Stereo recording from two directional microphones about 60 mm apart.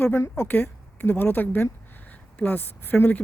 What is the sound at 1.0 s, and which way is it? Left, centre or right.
Speech, left.